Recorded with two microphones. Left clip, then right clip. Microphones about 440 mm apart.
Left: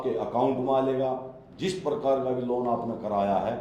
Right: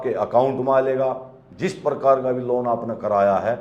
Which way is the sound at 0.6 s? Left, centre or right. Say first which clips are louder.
Right 6 dB; right.